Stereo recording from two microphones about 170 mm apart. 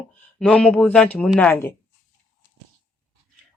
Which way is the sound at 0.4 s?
5° left (ahead or behind).